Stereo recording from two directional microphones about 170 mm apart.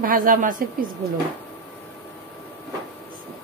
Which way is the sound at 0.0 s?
55° right (ahead or behind).